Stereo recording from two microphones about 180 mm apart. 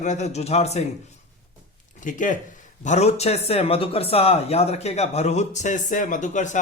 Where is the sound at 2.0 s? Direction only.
45° left (ahead or behind).